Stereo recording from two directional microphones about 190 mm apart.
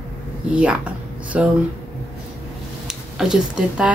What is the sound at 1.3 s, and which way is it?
Speech, 5° right (ahead or behind).